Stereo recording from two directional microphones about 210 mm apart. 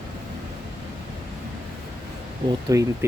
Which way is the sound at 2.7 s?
15° right (ahead or behind).